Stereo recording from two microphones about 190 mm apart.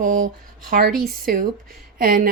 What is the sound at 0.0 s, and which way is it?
Speech, 45° right (ahead or behind).